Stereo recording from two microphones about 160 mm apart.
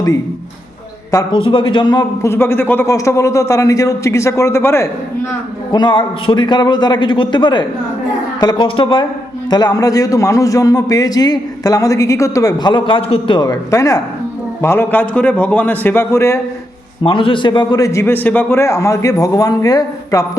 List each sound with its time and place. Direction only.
1.1 s speech: 30° left (ahead or behind)
2.3 s a man's voice: 15° left (ahead or behind)
5.7 s a man's voice: 30° left (ahead or behind)
17.0 s a man's voice: 35° left (ahead or behind)